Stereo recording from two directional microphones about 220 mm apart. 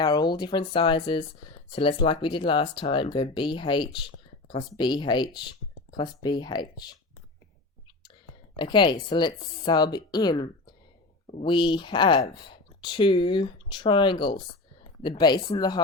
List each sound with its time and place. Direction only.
0.0 s speech: 20° left (ahead or behind)
8.5 s speech: 20° left (ahead or behind)